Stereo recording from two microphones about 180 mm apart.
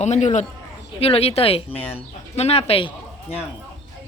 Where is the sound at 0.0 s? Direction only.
40° left (ahead or behind).